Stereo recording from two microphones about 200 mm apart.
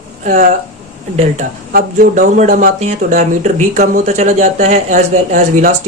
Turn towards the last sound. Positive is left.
turn(degrees=-35)  # may be behind; listen again after turning